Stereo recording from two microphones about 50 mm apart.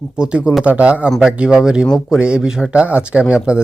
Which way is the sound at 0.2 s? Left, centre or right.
Right.